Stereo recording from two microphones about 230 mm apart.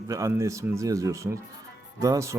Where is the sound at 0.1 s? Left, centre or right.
Centre.